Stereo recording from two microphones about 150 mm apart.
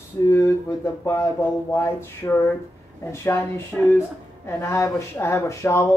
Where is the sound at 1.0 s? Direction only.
20° left (ahead or behind).